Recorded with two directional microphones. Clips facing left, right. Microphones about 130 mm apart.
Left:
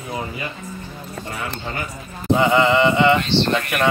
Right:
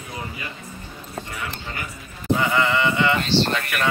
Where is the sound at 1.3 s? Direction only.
35° left (ahead or behind).